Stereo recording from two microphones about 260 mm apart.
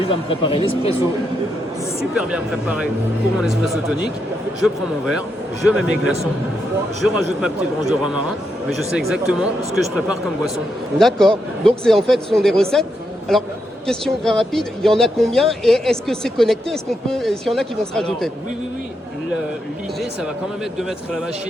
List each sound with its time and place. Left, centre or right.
0.1 s speech: centre
2.1 s speech: centre
7.0 s speech: centre
13.8 s speech: centre